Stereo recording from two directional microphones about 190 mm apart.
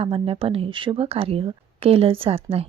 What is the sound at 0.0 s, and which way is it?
A woman's voice, 30° right (ahead or behind).